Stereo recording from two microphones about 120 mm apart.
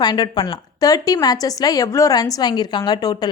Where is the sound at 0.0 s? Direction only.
35° left (ahead or behind).